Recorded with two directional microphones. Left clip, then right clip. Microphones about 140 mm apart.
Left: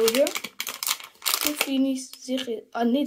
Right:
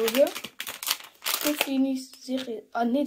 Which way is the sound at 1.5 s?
15° left (ahead or behind).